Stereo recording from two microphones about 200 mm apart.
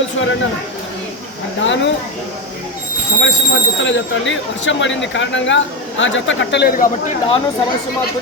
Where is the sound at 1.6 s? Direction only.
65° left (ahead or behind).